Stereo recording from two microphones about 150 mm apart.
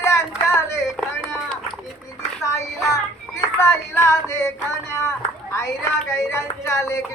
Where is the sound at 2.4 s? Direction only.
20° left (ahead or behind).